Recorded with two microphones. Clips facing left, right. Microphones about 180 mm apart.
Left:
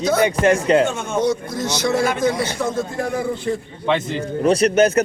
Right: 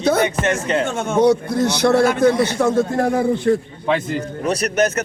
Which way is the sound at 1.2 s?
60° right (ahead or behind).